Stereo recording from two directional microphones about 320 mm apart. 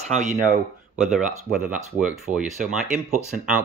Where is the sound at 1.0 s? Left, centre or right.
Centre.